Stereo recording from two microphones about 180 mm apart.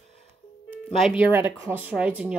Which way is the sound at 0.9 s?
Centre (ahead or behind).